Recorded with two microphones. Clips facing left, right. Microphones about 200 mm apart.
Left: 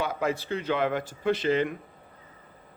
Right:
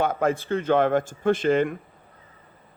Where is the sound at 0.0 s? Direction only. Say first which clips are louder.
Right 5 dB; 50° right (ahead or behind).